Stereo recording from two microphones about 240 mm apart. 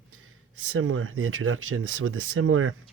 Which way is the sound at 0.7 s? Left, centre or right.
Right.